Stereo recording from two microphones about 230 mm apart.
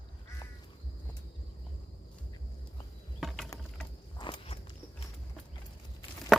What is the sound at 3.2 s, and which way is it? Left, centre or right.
Mechanisms, centre.